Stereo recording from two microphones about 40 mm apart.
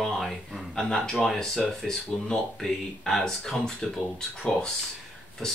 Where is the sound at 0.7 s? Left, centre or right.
Centre.